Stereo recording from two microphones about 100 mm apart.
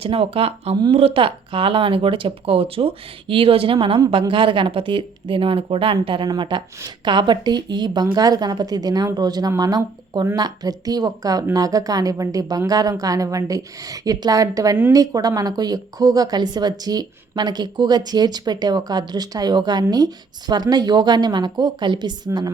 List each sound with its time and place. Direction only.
0.0 s speech: 70° right (ahead or behind)
0.9 s speech: 70° right (ahead or behind)
6.2 s a woman's voice: 45° right (ahead or behind)